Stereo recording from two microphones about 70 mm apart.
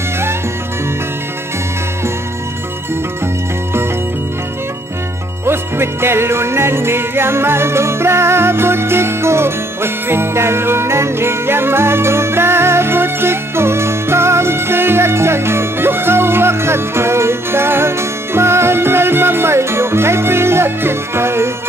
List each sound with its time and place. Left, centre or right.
5.4 s music: right